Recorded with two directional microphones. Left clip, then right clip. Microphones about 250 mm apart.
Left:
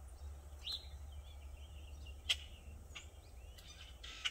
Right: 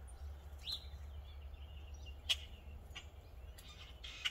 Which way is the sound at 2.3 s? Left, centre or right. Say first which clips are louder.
Even; centre.